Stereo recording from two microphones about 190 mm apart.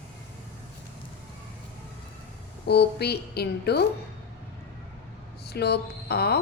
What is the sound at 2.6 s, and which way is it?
A woman's voice, 60° left (ahead or behind).